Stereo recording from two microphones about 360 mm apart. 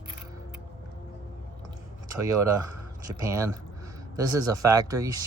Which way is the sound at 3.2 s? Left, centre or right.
Centre.